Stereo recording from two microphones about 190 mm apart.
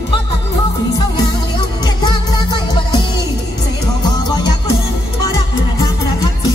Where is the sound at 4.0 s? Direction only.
25° left (ahead or behind).